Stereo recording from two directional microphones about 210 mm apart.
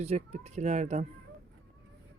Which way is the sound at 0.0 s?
30° right (ahead or behind).